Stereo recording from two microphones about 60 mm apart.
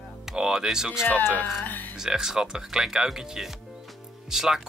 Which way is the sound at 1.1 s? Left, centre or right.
Left.